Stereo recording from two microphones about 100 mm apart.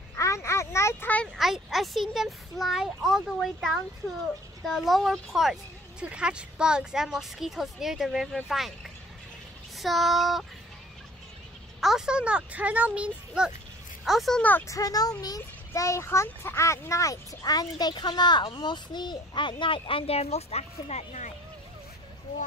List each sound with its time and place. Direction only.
0.1 s a sound: 30° left (ahead or behind)
1.1 s speech: 10° left (ahead or behind)
1.4 s speech: centre (ahead or behind)
9.8 s speech: centre (ahead or behind)
11.8 s speech: 5° right (ahead or behind)
14.7 s a child's voice: 40° left (ahead or behind); by 21.0 s 90° left